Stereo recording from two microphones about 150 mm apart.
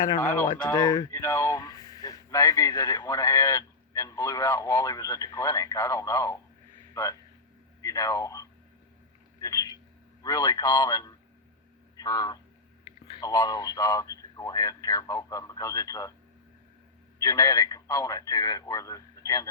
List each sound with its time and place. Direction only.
0.2 s speech: 15° left (ahead or behind)
0.8 s a man's voice: 25° left (ahead or behind)
9.4 s a sound: 25° left (ahead or behind)
10.2 s speech: 25° left (ahead or behind)
17.2 s speech: 25° left (ahead or behind)